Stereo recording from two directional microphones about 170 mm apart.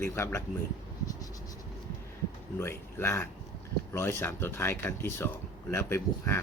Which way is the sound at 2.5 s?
15° left (ahead or behind).